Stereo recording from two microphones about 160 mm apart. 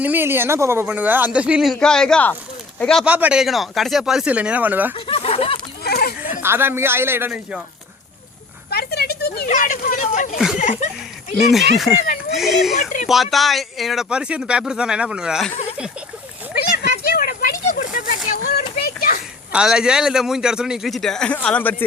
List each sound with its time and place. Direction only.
0.0 s a man's voice: 10° right (ahead or behind); by 3.0 s 5° left (ahead or behind)
3.0 s a man's voice: 10° right (ahead or behind)
4.9 s a sound: 35° left (ahead or behind)
5.8 s a sound: 75° left (ahead or behind)
6.4 s a man's voice: 15° right (ahead or behind)
8.7 s a sound: 85° left
9.5 s speech: 50° left (ahead or behind)
10.3 s speech: 5° right (ahead or behind)
10.6 s speech: 55° left (ahead or behind)
11.5 s speech: centre (ahead or behind)
12.7 s speech: 55° left (ahead or behind)
13.1 s speech: centre (ahead or behind)
16.6 s a sound: 75° left (ahead or behind)
19.5 s speech: 5° right (ahead or behind); by 21.8 s 10° left (ahead or behind)